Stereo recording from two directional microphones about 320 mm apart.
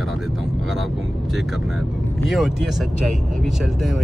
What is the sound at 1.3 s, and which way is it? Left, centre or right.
Speech, centre.